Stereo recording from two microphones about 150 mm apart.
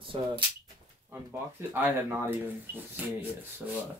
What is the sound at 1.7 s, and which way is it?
Speech, 15° right (ahead or behind).